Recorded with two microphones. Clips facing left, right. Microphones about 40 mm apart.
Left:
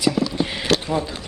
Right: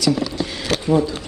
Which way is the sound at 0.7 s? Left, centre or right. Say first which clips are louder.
Right 5 dB; left.